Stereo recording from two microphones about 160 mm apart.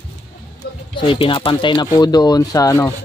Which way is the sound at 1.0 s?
30° left (ahead or behind).